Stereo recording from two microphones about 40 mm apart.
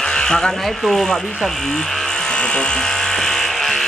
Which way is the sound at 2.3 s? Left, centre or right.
Left.